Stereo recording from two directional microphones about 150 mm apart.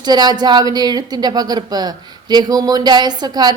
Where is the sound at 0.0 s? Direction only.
25° right (ahead or behind).